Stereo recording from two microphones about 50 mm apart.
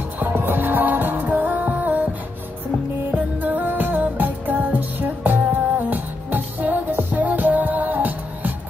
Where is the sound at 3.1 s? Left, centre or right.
Right.